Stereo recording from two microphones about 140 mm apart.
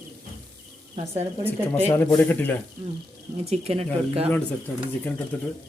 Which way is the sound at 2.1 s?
15° left (ahead or behind).